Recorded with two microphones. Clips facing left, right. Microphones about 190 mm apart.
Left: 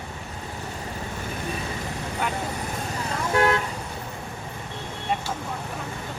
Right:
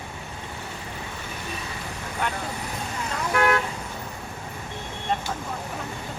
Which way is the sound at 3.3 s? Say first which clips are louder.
Left 1 dB; 25° left (ahead or behind).